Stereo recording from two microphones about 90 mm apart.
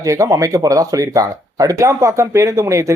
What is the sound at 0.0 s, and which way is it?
Speech, 35° right (ahead or behind).